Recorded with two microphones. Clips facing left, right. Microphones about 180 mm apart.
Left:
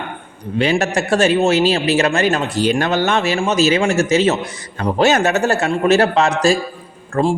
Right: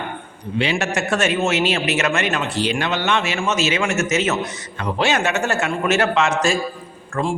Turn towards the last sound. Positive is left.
turn(degrees=35)  # may be behind; listen again after turning